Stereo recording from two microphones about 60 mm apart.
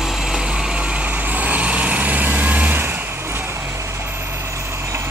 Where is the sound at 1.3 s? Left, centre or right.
Right.